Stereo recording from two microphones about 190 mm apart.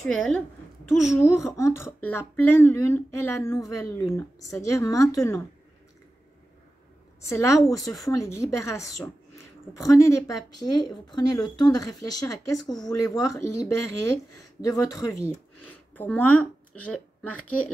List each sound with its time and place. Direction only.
0.0 s a woman's voice: 5° left (ahead or behind)
1.2 s speech: 15° left (ahead or behind)
7.2 s speech: 15° left (ahead or behind)